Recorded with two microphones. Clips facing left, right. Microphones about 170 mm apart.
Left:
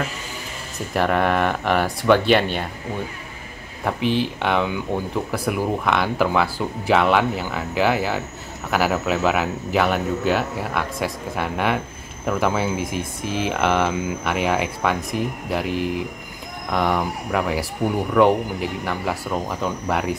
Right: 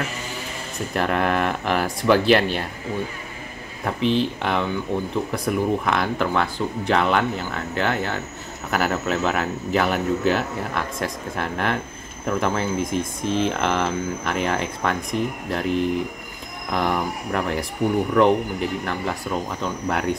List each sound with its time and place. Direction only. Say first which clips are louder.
0.9 s speech: left 2 dB; centre (ahead or behind)
3.8 s speech: even; 5° left (ahead or behind)